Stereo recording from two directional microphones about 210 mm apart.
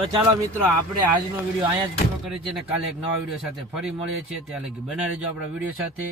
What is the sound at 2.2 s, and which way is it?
Speech, 5° right (ahead or behind).